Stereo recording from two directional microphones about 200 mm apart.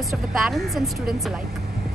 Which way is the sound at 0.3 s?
Centre (ahead or behind).